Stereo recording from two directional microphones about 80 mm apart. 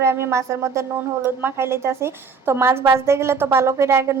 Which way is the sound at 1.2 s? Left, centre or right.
Right.